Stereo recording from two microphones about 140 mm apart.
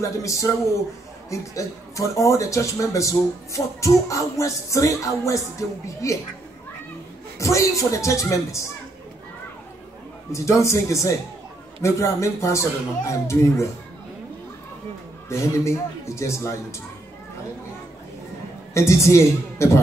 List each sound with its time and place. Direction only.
0.0 s speech: 20° left (ahead or behind)
7.3 s speech: 20° left (ahead or behind)
10.3 s speech: 20° left (ahead or behind)
15.2 s speech: 20° left (ahead or behind)
18.7 s speech: 20° left (ahead or behind)